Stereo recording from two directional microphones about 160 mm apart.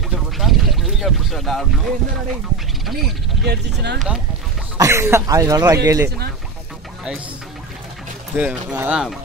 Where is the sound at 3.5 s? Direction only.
90° right.